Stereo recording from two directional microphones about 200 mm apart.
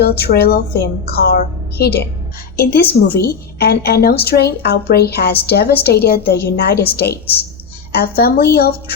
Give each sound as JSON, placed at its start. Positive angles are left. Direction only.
{"t": 0.0, "sound": "a woman's voice", "side_deg": 55}